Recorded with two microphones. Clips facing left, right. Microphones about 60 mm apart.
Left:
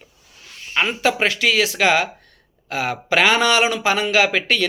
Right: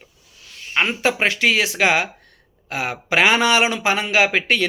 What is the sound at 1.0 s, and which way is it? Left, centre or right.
Speech, right.